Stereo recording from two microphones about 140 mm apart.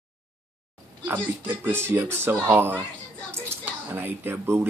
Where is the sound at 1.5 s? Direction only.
15° right (ahead or behind).